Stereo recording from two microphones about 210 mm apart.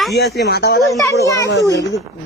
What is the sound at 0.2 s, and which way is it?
Speech, 50° left (ahead or behind).